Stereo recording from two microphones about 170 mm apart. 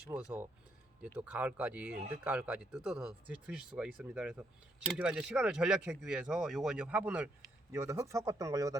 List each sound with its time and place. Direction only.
0.1 s speech: 10° right (ahead or behind)